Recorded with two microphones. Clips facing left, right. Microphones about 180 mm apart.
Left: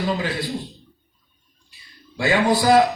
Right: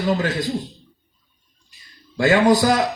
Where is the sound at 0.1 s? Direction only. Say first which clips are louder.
Right 3 dB; 45° right (ahead or behind).